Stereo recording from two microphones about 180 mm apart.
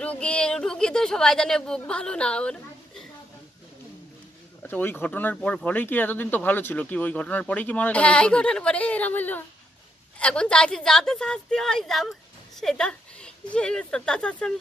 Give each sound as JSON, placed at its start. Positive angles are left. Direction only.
{"t": 0.0, "sound": "speech", "side_deg": 5}
{"t": 4.6, "sound": "a woman's voice", "side_deg": 10}